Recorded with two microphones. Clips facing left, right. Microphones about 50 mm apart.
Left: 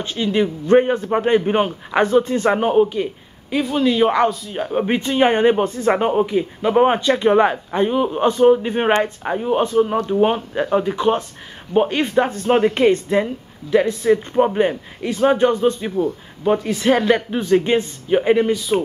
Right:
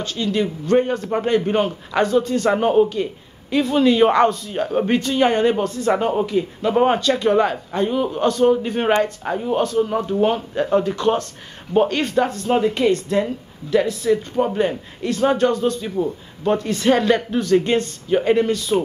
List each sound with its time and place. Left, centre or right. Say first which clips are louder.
0.0 s a man's voice: left 2 dB; left
16.0 s speech: left 2 dB; centre